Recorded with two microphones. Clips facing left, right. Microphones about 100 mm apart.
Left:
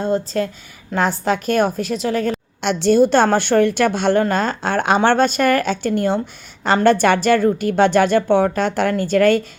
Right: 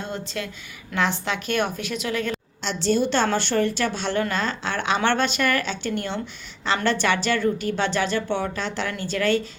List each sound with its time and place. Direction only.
0.0 s a woman's voice: 40° left (ahead or behind)
2.6 s speech: 60° left (ahead or behind)